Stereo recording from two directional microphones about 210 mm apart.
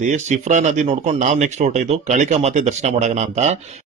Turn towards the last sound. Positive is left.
turn(degrees=-35)  # may be behind; listen again after turning